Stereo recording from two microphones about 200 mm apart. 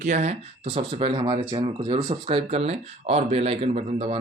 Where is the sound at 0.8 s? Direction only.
25° right (ahead or behind).